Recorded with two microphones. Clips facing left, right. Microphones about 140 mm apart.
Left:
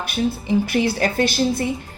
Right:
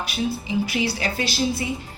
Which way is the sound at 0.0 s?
50° left (ahead or behind).